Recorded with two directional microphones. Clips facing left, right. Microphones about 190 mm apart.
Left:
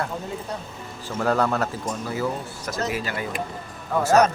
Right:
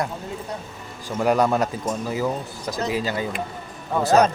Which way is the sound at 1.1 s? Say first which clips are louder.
Right 3 dB; 15° right (ahead or behind).